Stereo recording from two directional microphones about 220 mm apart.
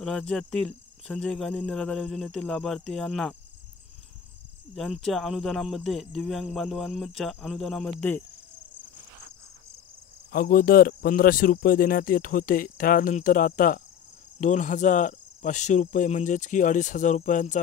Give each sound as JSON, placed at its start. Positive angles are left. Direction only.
{"t": 0.0, "sound": "speech", "side_deg": 0}
{"t": 4.7, "sound": "speech", "side_deg": 0}
{"t": 10.3, "sound": "speech", "side_deg": 40}